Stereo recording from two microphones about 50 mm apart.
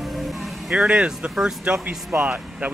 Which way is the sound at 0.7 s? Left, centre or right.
Centre.